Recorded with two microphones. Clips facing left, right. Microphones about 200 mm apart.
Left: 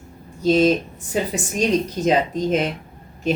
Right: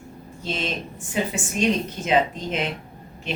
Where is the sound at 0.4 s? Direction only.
40° left (ahead or behind).